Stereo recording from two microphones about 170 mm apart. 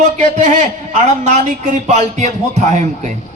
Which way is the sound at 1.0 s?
45° right (ahead or behind).